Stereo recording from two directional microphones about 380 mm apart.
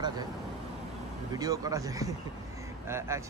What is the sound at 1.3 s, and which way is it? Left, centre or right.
Speech, centre.